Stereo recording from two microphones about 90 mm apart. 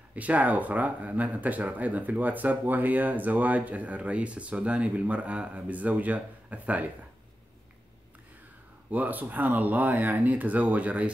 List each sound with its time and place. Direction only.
0.1 s speech: 15° right (ahead or behind)
8.9 s speech: 20° right (ahead or behind)